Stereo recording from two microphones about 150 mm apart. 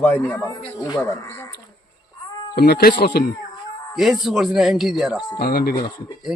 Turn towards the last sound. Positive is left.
turn(degrees=85)